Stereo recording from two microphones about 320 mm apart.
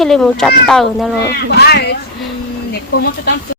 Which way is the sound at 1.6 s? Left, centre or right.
Left.